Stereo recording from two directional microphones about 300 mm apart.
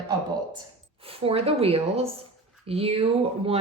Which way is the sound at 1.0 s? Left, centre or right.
Centre.